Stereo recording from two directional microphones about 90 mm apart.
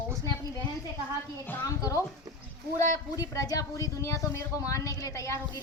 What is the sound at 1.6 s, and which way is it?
A woman's voice, 40° left (ahead or behind).